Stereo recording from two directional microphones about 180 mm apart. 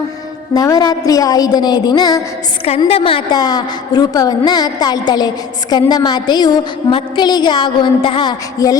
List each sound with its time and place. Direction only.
0.5 s a woman's voice: 20° left (ahead or behind)
2.6 s a woman's voice: 35° left (ahead or behind)